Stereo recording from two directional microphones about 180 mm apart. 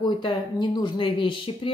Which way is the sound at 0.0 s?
25° left (ahead or behind).